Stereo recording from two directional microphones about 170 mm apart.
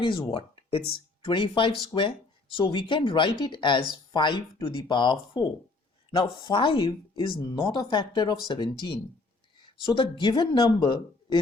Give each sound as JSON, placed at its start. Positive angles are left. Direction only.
{"t": 0.0, "sound": "speech", "side_deg": 30}